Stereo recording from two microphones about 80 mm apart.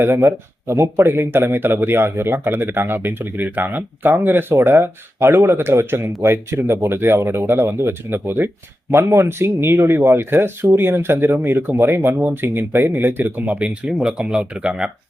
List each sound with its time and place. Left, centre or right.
0.0 s speech: right; by 14.8 s centre